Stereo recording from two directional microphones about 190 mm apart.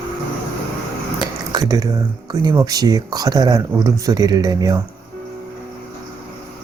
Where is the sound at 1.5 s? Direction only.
20° right (ahead or behind).